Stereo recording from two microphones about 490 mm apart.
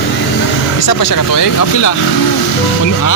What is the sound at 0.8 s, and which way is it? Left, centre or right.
Speech, left.